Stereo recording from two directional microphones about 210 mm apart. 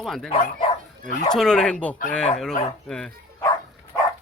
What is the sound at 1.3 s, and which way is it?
A man's voice, centre (ahead or behind).